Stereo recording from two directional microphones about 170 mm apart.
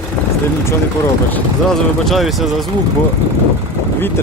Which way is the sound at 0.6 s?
15° left (ahead or behind).